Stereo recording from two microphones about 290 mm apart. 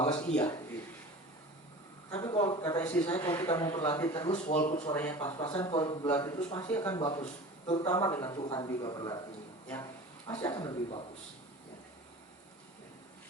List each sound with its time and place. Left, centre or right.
0.2 s speech: centre
2.0 s a man's voice: centre
4.1 s speech: left
4.9 s a man's voice: centre
10.2 s speech: centre
10.5 s a man's voice: centre